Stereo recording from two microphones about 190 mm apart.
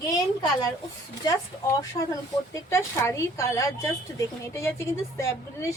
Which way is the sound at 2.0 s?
30° left (ahead or behind).